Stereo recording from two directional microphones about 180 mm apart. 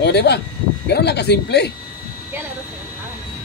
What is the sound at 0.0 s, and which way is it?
Speech, 70° left (ahead or behind).